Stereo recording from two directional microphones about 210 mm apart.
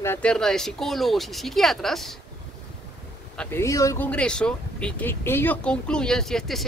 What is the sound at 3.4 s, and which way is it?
Speech, 10° left (ahead or behind).